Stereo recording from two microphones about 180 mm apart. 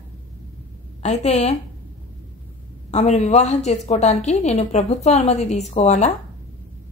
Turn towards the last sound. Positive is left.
turn(degrees=40)  # may be behind; listen again after turning